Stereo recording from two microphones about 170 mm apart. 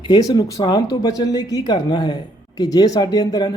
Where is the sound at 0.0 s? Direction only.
20° left (ahead or behind).